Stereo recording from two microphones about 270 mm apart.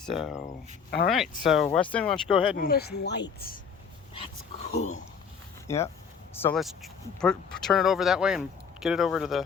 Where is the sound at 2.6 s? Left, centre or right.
Left.